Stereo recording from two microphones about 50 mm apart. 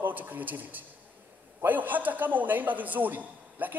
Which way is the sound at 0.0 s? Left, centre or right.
Right.